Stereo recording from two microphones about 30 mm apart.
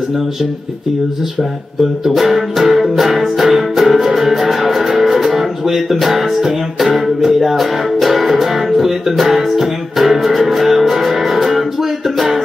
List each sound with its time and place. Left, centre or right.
2.0 s music: centre